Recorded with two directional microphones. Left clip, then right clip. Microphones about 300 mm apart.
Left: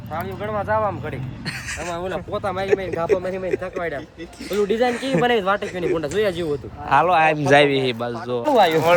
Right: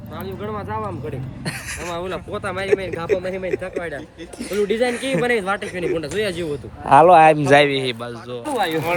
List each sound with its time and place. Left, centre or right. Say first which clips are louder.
0.1 s speech: left 3 dB; centre
6.3 s speech: left 1 dB; centre
8.4 s speech: left 6 dB; left